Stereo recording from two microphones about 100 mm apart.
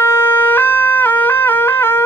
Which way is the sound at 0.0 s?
20° left (ahead or behind).